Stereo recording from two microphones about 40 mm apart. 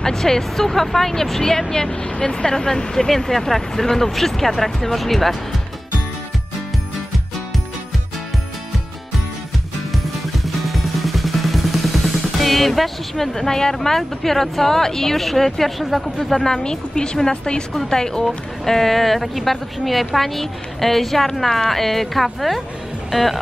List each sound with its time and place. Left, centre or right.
0.0 s speech: centre
10.4 s music: centre
15.9 s speech: centre
16.4 s a woman's voice: centre
23.1 s speech: centre